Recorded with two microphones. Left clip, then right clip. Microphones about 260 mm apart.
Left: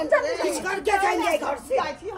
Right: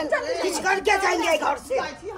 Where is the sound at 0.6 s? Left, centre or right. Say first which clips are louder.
Right 5 dB; right.